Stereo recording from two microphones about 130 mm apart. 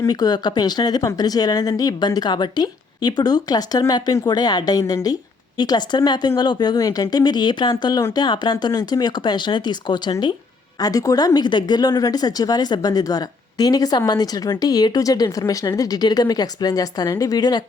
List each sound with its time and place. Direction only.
0.0 s speech: 30° left (ahead or behind)